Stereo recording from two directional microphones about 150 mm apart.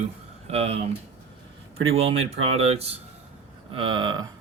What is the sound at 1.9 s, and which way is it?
Speech, 45° right (ahead or behind).